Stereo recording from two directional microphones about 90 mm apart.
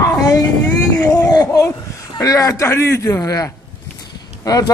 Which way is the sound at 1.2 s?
45° left (ahead or behind).